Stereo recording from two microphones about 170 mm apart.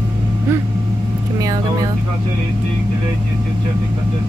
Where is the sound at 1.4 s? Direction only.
20° right (ahead or behind).